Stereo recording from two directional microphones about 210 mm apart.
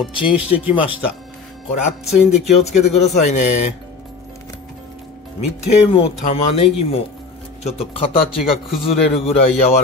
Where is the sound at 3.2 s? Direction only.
35° left (ahead or behind).